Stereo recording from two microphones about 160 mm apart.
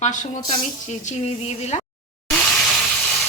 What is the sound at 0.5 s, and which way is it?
A woman's voice, 50° left (ahead or behind).